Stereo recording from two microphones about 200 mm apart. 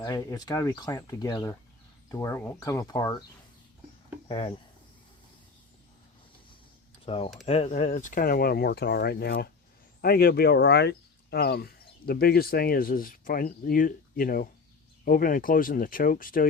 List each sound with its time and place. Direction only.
0.0 s speech: 15° left (ahead or behind)
4.3 s speech: 25° left (ahead or behind)
7.0 s speech: 25° left (ahead or behind); by 16.5 s 45° left (ahead or behind)